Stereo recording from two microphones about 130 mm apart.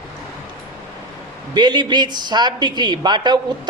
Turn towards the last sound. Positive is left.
turn(degrees=-35)  # may be behind; listen again after turning